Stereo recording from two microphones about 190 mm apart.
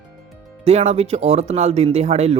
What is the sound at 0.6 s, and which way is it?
Speech, 35° right (ahead or behind).